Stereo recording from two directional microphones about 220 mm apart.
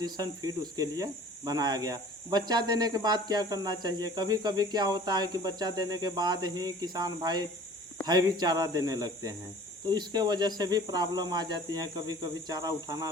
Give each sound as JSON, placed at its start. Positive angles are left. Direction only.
{"t": 0.0, "sound": "speech", "side_deg": -20}